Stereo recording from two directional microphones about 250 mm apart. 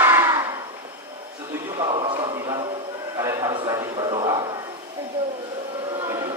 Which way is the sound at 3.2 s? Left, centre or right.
Centre.